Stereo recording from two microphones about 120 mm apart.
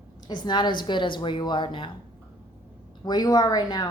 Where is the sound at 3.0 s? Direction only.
35° left (ahead or behind).